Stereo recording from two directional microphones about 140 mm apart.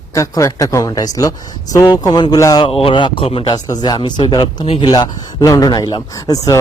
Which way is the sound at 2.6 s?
40° left (ahead or behind).